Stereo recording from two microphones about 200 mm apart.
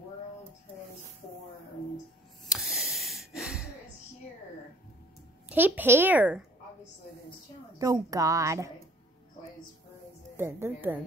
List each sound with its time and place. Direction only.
2.4 s a sound: centre (ahead or behind)
5.5 s a woman's voice: 10° right (ahead or behind)
7.8 s a woman's voice: 15° right (ahead or behind)
10.3 s a woman's voice: 10° right (ahead or behind)